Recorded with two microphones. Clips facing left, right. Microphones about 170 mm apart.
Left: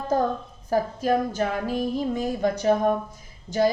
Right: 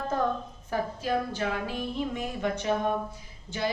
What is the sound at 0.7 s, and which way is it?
A woman's voice, 40° left (ahead or behind).